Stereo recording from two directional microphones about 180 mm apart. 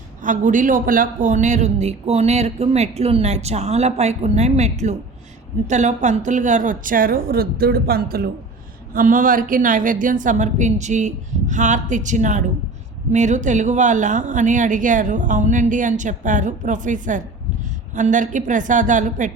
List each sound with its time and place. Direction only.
0.2 s a man's voice: 45° right (ahead or behind)